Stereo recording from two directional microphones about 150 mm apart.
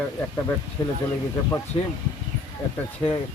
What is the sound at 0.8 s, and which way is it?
Speech, 30° left (ahead or behind).